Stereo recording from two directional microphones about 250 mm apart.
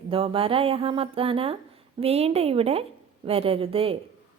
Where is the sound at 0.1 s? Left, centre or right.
Right.